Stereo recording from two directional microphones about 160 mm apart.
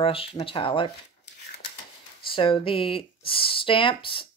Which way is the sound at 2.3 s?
35° left (ahead or behind).